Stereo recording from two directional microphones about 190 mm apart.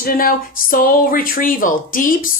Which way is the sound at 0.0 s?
50° left (ahead or behind).